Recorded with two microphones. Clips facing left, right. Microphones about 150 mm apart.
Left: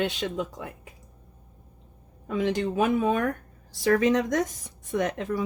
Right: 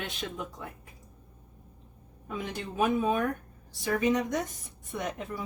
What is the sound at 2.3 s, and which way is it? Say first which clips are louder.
Speech: left 10 dB; 90° left.